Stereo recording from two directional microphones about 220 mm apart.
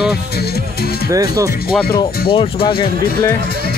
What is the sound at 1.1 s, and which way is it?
Speech, 15° right (ahead or behind).